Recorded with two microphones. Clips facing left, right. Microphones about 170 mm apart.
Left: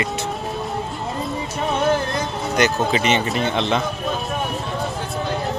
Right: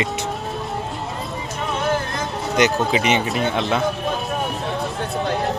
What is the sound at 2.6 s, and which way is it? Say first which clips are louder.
Speech: right 1 dB; 15° right (ahead or behind).